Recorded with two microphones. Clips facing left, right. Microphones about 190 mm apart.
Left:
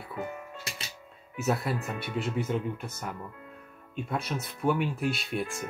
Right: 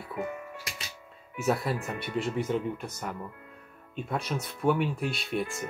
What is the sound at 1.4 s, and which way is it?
Speech, centre (ahead or behind).